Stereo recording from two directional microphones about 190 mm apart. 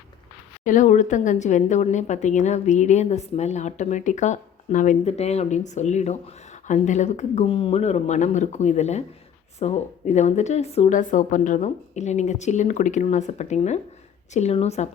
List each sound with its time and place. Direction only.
0.6 s a woman's voice: 40° left (ahead or behind)